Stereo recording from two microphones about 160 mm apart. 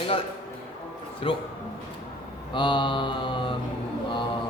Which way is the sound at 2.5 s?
30° left (ahead or behind).